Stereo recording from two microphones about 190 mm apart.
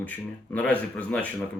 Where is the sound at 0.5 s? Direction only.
5° left (ahead or behind).